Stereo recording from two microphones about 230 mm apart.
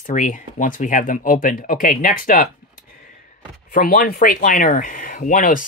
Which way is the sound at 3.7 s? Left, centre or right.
Left.